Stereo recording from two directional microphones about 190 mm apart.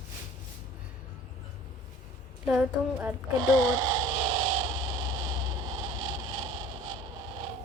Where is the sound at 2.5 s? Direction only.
5° right (ahead or behind).